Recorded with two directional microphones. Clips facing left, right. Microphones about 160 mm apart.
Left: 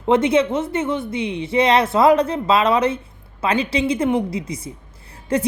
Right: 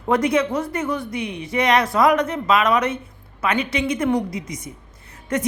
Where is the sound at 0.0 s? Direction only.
25° left (ahead or behind).